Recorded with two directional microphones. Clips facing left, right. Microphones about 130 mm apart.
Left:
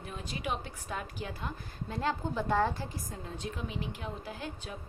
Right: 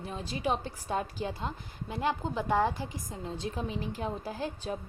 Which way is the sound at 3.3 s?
35° right (ahead or behind).